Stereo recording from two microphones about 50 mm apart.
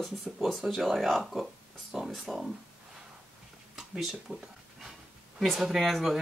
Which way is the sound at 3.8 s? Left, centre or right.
Centre.